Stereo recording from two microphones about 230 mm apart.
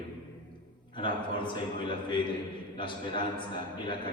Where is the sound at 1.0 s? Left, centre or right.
Left.